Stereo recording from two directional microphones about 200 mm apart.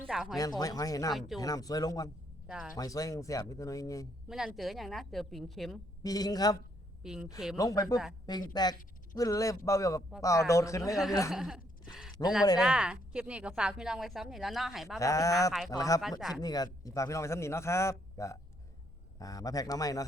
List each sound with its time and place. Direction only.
0.0 s speech: centre (ahead or behind)
0.6 s a man's voice: 20° left (ahead or behind)
2.5 s a woman's voice: 5° right (ahead or behind)
2.7 s a man's voice: 15° left (ahead or behind)
4.3 s a woman's voice: 5° right (ahead or behind)
6.0 s a man's voice: 20° left (ahead or behind)
7.0 s a woman's voice: 5° right (ahead or behind)
7.5 s a man's voice: 15° left (ahead or behind)
11.3 s a woman's voice: centre (ahead or behind)
12.2 s a man's voice: 20° left (ahead or behind)
12.5 s a woman's voice: 5° right (ahead or behind)
14.9 s a man's voice: 15° left (ahead or behind)